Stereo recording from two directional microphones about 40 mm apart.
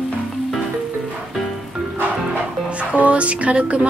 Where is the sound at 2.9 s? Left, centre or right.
Right.